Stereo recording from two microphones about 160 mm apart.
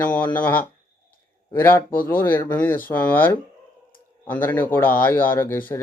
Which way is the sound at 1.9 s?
60° left (ahead or behind).